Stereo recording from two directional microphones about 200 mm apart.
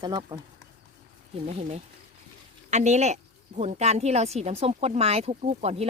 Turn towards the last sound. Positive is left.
turn(degrees=-30)  # may be behind; listen again after turning